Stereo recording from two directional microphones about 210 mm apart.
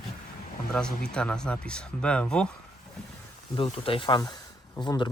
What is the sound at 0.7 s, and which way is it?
Speech, 5° left (ahead or behind).